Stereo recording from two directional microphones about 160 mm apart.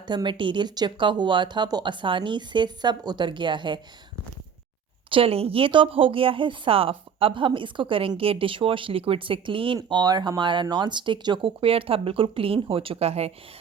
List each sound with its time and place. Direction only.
0.1 s speech: 30° right (ahead or behind)
5.1 s speech: 35° right (ahead or behind)